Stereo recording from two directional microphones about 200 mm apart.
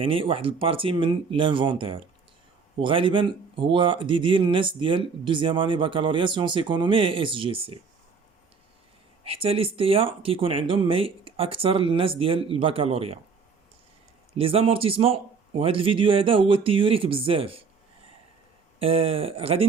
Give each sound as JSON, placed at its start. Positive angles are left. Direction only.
{"t": 0.0, "sound": "speech", "side_deg": -25}
{"t": 9.2, "sound": "speech", "side_deg": -30}
{"t": 14.3, "sound": "speech", "side_deg": -30}
{"t": 18.8, "sound": "speech", "side_deg": -30}